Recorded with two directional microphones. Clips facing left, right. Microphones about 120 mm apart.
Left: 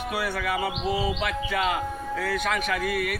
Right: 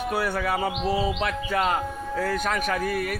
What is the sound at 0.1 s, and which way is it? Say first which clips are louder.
A man's voice: right 2 dB; 40° right (ahead or behind).